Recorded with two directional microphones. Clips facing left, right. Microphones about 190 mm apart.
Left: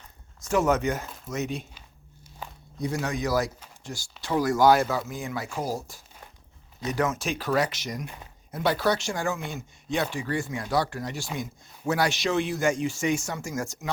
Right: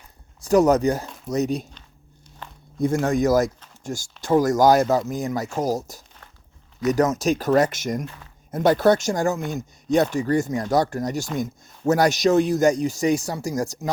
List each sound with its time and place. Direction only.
0.4 s speech: 40° right (ahead or behind)
2.4 s walk: 10° left (ahead or behind)
2.7 s speech: 50° right (ahead or behind)
8.0 s speech: 15° left (ahead or behind)
8.4 s speech: 45° right (ahead or behind)